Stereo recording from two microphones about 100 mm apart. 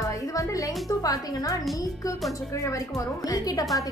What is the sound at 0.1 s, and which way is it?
Music, 35° left (ahead or behind).